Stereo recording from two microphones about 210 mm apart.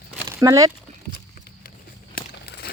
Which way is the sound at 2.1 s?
50° left (ahead or behind).